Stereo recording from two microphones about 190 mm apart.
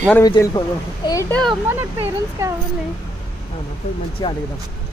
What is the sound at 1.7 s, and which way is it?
Speech, 10° right (ahead or behind).